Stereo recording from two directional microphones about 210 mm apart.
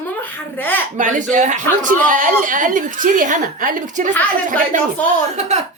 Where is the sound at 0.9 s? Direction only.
35° right (ahead or behind).